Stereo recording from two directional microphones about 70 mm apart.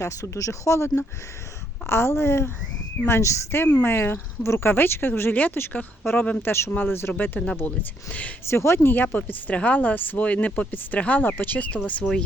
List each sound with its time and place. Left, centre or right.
0.0 s speech: left
8.4 s speech: left; by 12.2 s centre